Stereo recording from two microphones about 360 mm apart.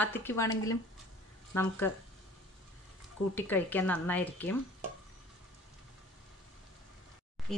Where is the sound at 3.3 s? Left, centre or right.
Centre.